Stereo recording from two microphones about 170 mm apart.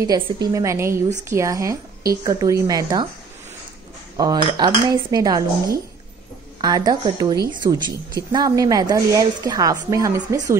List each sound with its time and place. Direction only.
0.0 s a woman's voice: 20° right (ahead or behind)
4.2 s a woman's voice: 25° right (ahead or behind)
6.6 s a woman's voice: 20° right (ahead or behind)